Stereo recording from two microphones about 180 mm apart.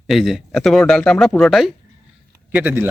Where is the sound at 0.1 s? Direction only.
Centre (ahead or behind).